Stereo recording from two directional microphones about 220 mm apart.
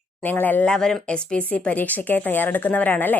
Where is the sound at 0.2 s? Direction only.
10° left (ahead or behind).